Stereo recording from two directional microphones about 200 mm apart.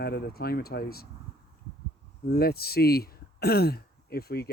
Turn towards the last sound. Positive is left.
turn(degrees=50)  # may be behind; listen again after turning